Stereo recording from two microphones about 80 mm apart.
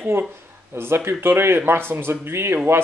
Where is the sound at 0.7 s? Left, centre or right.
Right.